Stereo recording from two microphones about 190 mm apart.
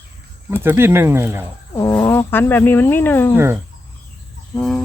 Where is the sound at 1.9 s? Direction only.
15° left (ahead or behind).